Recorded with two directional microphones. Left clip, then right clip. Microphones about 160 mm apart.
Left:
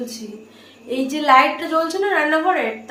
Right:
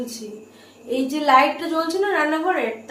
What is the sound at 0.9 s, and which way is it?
A woman's voice, 25° left (ahead or behind).